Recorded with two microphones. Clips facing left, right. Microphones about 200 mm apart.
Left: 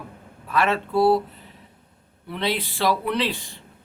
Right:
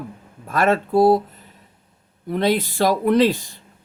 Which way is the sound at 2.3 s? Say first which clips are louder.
Right 7 dB; 45° right (ahead or behind).